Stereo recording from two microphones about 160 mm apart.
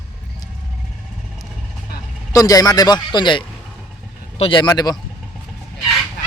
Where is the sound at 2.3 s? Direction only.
20° left (ahead or behind).